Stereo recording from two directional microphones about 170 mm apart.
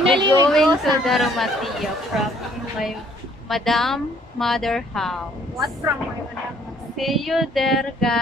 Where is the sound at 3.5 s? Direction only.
Centre (ahead or behind).